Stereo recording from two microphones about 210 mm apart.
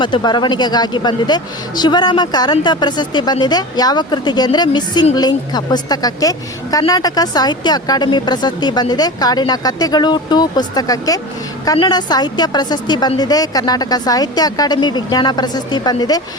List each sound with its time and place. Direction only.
0.0 s speech: 20° left (ahead or behind)